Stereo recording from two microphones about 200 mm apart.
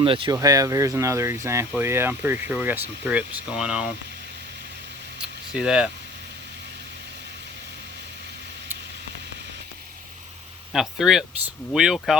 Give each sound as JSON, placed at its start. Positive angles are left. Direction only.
{"t": 0.0, "sound": "speech", "side_deg": -25}
{"t": 5.2, "sound": "speech", "side_deg": -5}
{"t": 10.7, "sound": "speech", "side_deg": 0}